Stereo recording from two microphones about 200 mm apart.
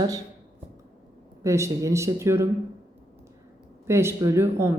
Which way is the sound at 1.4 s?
15° right (ahead or behind).